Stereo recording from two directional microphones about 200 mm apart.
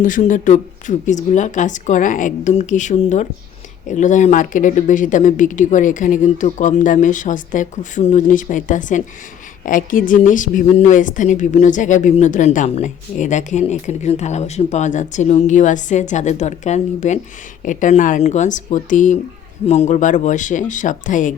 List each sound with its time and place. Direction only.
0.0 s a woman's voice: 40° left (ahead or behind)